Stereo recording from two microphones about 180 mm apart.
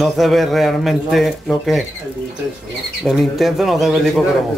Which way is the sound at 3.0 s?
Centre (ahead or behind).